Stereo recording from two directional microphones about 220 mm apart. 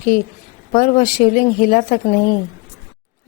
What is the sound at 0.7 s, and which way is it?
A woman's voice, 35° left (ahead or behind).